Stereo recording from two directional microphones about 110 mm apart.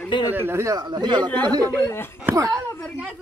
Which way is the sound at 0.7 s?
40° right (ahead or behind).